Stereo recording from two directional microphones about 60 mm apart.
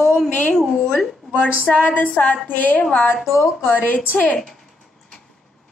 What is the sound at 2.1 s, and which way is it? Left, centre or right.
Speech, left.